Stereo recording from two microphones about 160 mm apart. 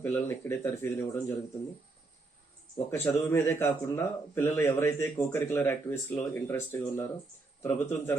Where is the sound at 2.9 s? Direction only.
15° left (ahead or behind).